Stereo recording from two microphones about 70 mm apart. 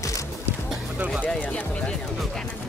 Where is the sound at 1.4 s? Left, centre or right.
Left.